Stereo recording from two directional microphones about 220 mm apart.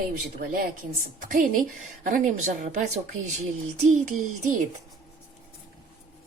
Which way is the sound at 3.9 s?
35° right (ahead or behind).